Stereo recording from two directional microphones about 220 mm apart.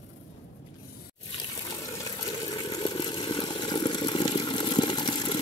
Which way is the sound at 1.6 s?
15° left (ahead or behind).